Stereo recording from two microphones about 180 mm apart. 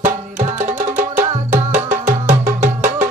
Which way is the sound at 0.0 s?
45° right (ahead or behind).